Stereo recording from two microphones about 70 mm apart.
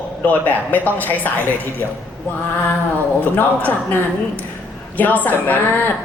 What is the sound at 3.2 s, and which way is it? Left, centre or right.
A man's voice, left.